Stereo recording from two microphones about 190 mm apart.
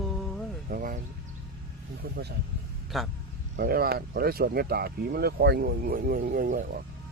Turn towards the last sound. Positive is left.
turn(degrees=-45)  # may be behind; listen again after turning